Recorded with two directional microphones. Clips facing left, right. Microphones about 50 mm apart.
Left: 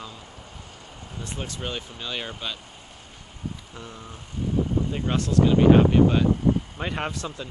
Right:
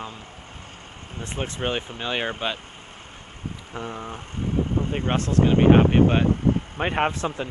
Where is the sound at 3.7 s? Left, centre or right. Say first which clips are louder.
Right 8 dB; right.